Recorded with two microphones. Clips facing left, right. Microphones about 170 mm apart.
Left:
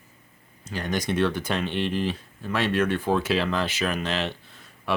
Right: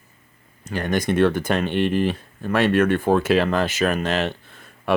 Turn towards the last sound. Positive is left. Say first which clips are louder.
# right 5 dB
turn(degrees=-55)  # may be behind; listen again after turning